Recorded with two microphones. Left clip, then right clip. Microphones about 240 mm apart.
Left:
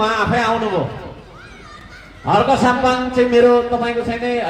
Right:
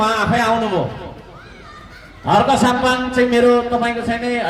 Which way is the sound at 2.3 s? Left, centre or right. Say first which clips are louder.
Even; right.